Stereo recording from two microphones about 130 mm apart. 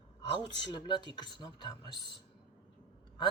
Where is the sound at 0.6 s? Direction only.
35° left (ahead or behind).